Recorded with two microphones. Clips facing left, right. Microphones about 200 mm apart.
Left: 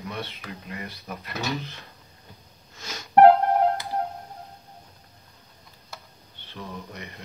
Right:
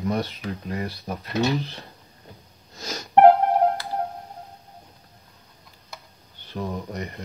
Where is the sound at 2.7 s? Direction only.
40° right (ahead or behind).